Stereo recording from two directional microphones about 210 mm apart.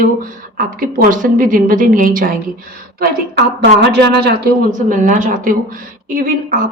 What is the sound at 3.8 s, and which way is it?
Speech, 55° right (ahead or behind).